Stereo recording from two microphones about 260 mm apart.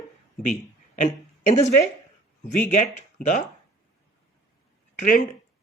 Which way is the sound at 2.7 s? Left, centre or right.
Left.